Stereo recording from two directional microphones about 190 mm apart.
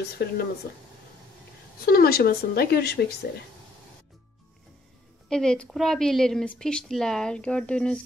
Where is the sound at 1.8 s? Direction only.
50° left (ahead or behind).